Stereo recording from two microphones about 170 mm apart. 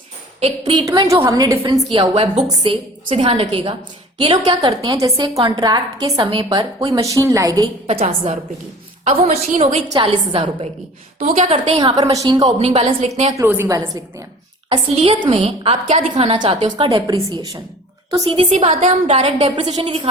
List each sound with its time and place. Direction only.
0.3 s a woman's voice: 30° right (ahead or behind)
7.9 s a woman's voice: 35° right (ahead or behind)
11.2 s a woman's voice: 45° right (ahead or behind)
11.8 s a woman's voice: 25° right (ahead or behind)
12.5 s a woman's voice: 35° right (ahead or behind)
13.3 s a woman's voice: 15° right (ahead or behind)
14.7 s a woman's voice: 30° right (ahead or behind)
19.5 s a woman's voice: 30° right (ahead or behind)